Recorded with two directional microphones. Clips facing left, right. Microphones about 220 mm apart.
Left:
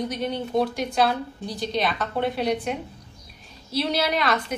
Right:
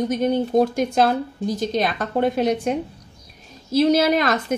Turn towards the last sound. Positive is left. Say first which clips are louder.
# right 5 dB
turn(degrees=-45)  # may be behind; listen again after turning